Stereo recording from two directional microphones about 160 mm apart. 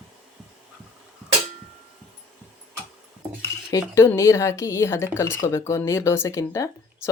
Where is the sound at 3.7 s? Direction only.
20° left (ahead or behind).